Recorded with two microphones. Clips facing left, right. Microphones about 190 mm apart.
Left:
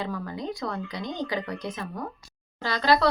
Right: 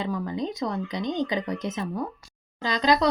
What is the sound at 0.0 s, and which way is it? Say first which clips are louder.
Speech: right 3 dB; 20° right (ahead or behind).